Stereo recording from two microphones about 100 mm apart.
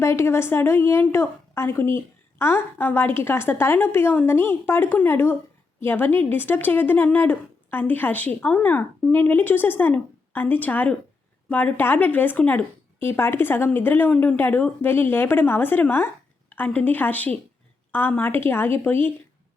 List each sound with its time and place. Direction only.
0.0 s a woman's voice: 25° left (ahead or behind)